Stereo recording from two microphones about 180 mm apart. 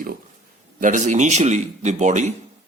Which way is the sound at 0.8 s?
45° right (ahead or behind).